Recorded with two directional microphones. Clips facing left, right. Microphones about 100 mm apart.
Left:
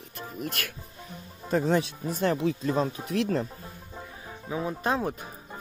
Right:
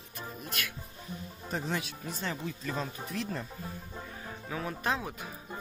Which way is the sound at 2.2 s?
70° left (ahead or behind).